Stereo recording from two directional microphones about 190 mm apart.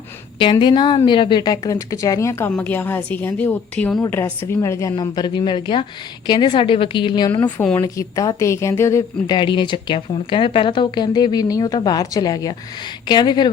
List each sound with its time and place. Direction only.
0.5 s a woman's voice: 25° left (ahead or behind)
7.4 s a woman's voice: 5° left (ahead or behind)
7.8 s speech: 15° left (ahead or behind)